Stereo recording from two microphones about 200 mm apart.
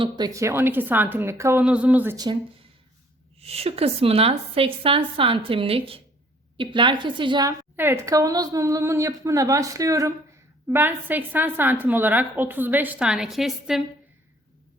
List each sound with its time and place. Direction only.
0.0 s a woman's voice: 20° right (ahead or behind)
3.4 s a woman's voice: 30° right (ahead or behind); by 13.8 s centre (ahead or behind)